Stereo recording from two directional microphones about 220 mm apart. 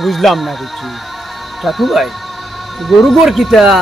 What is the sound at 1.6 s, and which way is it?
Speech, centre (ahead or behind).